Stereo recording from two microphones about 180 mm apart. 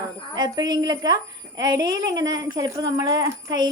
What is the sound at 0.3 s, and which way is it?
A woman's voice, 25° right (ahead or behind).